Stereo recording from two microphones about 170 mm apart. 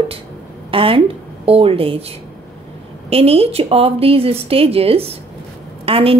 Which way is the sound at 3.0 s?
35° right (ahead or behind).